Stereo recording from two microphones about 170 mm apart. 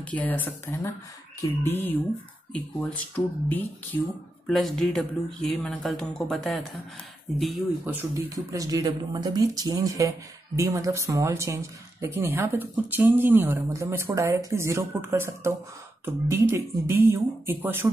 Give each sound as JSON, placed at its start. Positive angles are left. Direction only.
{"t": 0.0, "sound": "speech", "side_deg": 10}
{"t": 7.8, "sound": "speech", "side_deg": -10}